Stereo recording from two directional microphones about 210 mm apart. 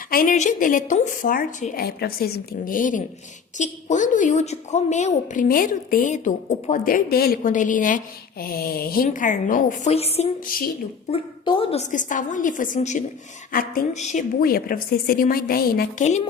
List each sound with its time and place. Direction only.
0.1 s a woman's voice: 40° left (ahead or behind)
10.4 s a woman's voice: 45° left (ahead or behind)
11.1 s a woman's voice: 25° left (ahead or behind); by 16.0 s 45° left (ahead or behind)
16.0 s a woman's voice: 30° left (ahead or behind)